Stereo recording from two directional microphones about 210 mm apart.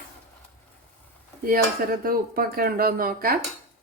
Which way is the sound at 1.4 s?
45° right (ahead or behind).